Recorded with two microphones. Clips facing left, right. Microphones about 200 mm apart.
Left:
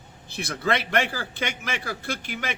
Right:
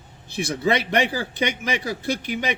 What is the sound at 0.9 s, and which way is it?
A man's voice, 15° right (ahead or behind).